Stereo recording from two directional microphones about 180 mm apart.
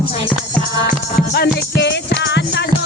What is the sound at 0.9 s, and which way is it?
Music, 60° left (ahead or behind).